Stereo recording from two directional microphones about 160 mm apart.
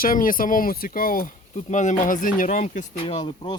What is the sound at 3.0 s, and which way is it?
Speech, 30° left (ahead or behind).